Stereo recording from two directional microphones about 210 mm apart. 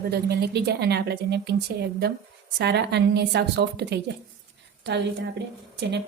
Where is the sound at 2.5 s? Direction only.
50° right (ahead or behind).